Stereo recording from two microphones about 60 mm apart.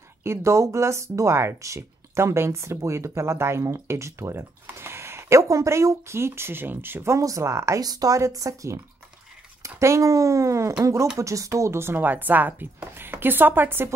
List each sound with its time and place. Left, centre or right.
0.2 s speech: right
7.2 s speech: right